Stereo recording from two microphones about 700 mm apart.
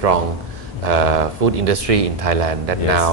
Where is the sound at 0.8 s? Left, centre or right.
Right.